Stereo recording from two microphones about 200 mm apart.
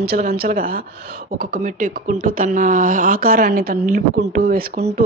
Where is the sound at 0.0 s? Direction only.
50° right (ahead or behind).